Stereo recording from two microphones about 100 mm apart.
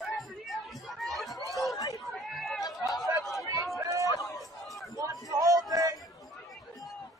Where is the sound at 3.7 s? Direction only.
30° right (ahead or behind).